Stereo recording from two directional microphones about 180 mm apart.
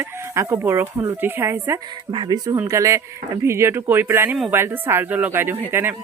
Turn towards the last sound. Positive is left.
turn(degrees=-10)  # may be behind; listen again after turning